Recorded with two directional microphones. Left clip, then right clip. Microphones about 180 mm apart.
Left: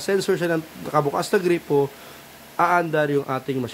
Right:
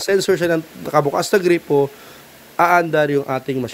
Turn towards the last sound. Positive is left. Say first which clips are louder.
# right 4 dB
turn(degrees=-20)  # may be behind; listen again after turning